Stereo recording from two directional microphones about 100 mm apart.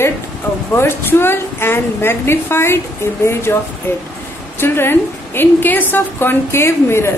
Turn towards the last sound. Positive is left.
turn(degrees=25)  # may be behind; listen again after turning